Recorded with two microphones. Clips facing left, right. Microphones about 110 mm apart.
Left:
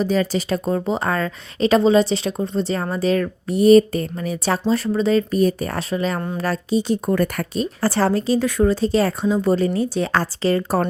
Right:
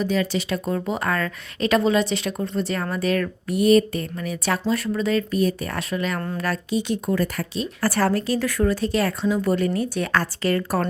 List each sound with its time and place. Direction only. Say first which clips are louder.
0.0 s a woman's voice: left 3 dB; 35° left (ahead or behind)
7.1 s speech: left 3 dB; 50° left (ahead or behind)
7.8 s speech: left 2 dB; 25° left (ahead or behind)